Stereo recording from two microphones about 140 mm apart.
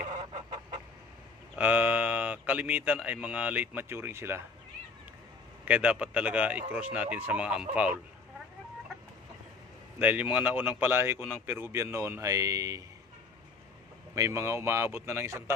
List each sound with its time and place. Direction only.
0.3 s chicken: 35° right (ahead or behind)
1.5 s a man's voice: 10° right (ahead or behind)
5.6 s speech: 10° right (ahead or behind)
10.0 s speech: 10° right (ahead or behind)
14.2 s speech: 20° right (ahead or behind)